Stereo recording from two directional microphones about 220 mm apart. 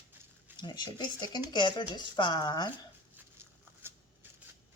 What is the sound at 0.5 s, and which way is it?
Speech, 20° left (ahead or behind).